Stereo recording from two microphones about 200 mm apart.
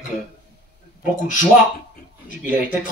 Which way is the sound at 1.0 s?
40° left (ahead or behind).